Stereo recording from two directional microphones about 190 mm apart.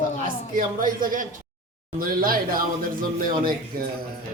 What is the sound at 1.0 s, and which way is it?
Speech, 45° right (ahead or behind).